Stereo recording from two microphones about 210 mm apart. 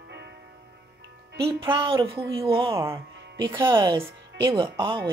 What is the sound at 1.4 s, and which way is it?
Speech, 25° right (ahead or behind).